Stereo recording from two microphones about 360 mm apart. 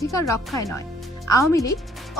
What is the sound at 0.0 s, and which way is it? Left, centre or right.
Speech, centre.